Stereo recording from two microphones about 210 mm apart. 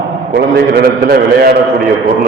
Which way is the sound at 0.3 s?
50° right (ahead or behind).